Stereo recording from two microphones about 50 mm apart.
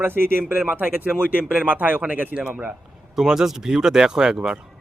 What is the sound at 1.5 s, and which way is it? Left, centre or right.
Speech, right.